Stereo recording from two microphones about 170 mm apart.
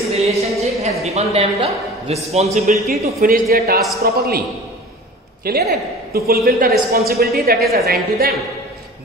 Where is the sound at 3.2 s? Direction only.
60° right (ahead or behind).